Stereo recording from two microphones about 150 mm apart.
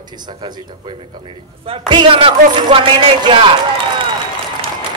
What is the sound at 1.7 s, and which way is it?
A man's voice, 35° right (ahead or behind).